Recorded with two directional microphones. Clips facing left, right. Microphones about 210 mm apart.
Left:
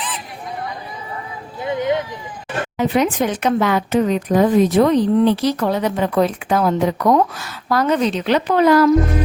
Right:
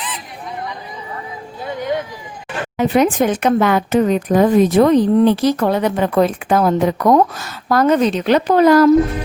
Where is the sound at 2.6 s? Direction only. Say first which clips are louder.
Right 3 dB; 45° right (ahead or behind).